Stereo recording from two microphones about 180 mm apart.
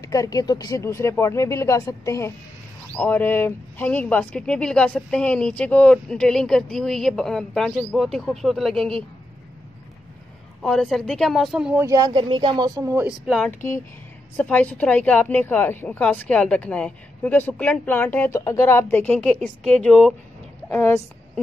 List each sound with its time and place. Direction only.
0.0 s a woman's voice: 20° left (ahead or behind); by 9.0 s 5° left (ahead or behind)
10.6 s speech: 5° left (ahead or behind)
11.8 s speech: 20° right (ahead or behind)
14.3 s a woman's voice: 10° left (ahead or behind)